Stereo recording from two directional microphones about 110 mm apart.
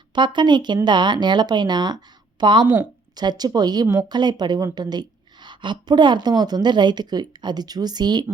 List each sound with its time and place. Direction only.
0.1 s a woman's voice: 45° right (ahead or behind)